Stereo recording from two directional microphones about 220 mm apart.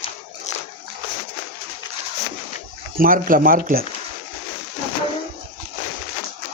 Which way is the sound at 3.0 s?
40° right (ahead or behind).